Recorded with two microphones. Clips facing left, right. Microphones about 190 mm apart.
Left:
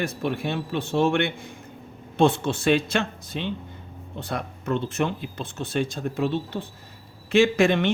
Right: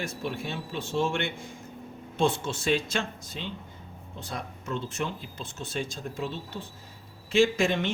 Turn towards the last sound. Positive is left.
turn(degrees=65)  # may be behind; listen again after turning